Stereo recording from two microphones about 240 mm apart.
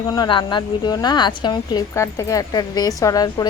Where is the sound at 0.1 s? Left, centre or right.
Centre.